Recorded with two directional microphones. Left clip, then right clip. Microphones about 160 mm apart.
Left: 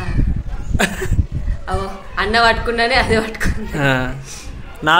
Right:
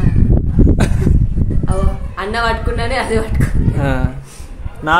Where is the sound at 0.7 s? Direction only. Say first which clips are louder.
Left 1 dB; centre (ahead or behind).